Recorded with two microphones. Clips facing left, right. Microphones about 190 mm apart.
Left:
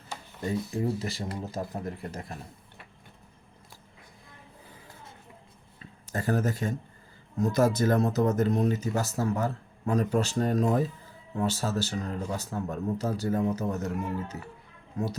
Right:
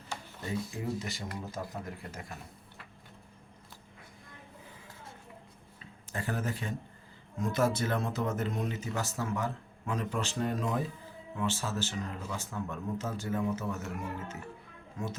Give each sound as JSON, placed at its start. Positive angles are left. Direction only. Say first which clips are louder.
{"t": 0.4, "sound": "speech", "louder": "left 6 dB", "side_deg": 35}
{"t": 6.1, "sound": "speech", "louder": "left 7 dB", "side_deg": 40}